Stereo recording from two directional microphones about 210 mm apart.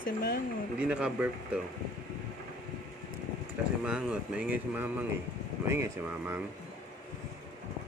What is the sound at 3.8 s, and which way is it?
Speech, 5° right (ahead or behind).